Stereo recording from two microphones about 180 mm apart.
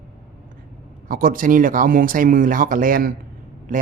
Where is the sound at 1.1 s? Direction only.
50° right (ahead or behind).